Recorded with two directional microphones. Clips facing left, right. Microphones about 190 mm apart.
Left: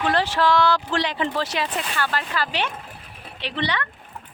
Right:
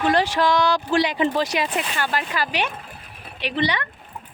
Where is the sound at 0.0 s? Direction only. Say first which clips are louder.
Right 2 dB; 15° right (ahead or behind).